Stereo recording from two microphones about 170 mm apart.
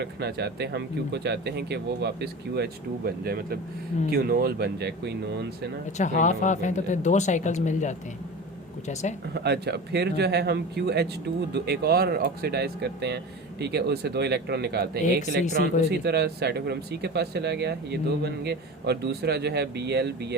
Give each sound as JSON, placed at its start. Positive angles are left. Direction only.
{"t": 0.0, "sound": "speech", "side_deg": -75}
{"t": 6.0, "sound": "speech", "side_deg": 45}
{"t": 9.3, "sound": "speech", "side_deg": -75}